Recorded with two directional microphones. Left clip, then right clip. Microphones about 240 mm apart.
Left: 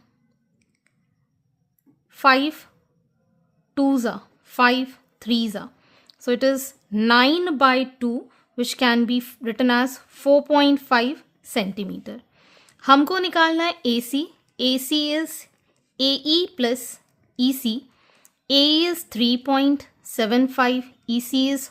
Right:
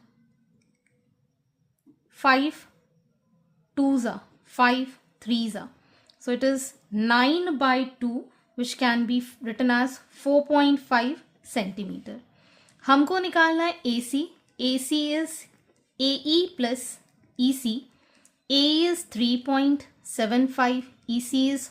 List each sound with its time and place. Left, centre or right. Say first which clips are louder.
2.0 s a woman's voice: left 4 dB; left
3.8 s a woman's voice: left 4 dB; left